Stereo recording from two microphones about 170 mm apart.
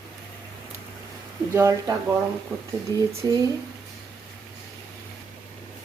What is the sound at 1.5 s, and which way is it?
Speech, 20° right (ahead or behind).